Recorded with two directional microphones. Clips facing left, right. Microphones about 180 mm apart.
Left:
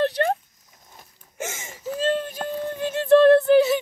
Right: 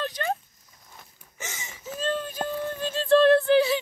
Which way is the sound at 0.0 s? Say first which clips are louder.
Left 7 dB; 65° left (ahead or behind).